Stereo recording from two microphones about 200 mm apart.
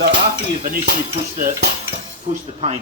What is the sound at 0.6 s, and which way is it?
Speech, 50° right (ahead or behind).